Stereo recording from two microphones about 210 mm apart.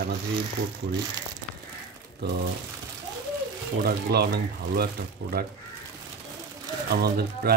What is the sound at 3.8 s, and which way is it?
Speech, 50° right (ahead or behind).